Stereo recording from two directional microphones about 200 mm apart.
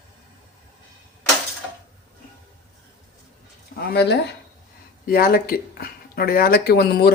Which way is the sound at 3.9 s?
55° left (ahead or behind).